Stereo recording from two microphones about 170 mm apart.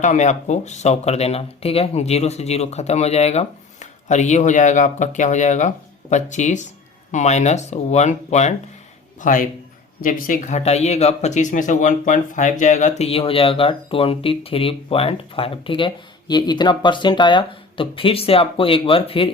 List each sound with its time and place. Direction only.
0.0 s speech: 45° left (ahead or behind)
13.0 s speech: 35° left (ahead or behind)